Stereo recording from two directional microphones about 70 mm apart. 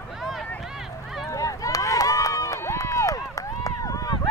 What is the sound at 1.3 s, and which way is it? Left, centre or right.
Run, left.